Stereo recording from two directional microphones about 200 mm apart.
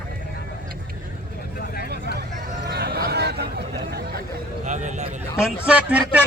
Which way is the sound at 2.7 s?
50° right (ahead or behind).